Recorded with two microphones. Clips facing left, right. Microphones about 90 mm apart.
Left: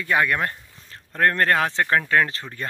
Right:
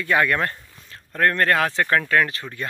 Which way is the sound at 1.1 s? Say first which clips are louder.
Even; 25° left (ahead or behind).